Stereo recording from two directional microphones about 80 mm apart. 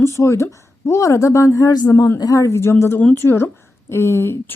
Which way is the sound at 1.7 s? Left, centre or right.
Left.